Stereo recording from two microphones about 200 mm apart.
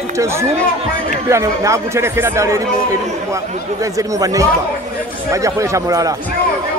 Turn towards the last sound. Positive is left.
turn(degrees=-15)  # may be behind; listen again after turning